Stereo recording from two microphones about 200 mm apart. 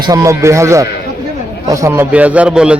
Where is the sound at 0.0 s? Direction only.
15° right (ahead or behind).